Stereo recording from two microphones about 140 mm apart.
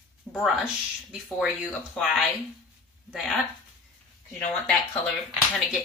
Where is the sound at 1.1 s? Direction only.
Centre (ahead or behind).